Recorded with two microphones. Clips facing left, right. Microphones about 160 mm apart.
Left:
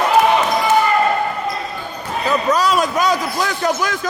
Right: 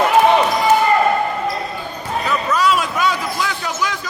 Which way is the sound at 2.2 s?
35° left (ahead or behind).